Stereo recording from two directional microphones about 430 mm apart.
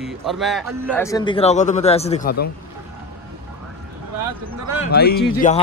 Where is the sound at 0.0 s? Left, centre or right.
Centre.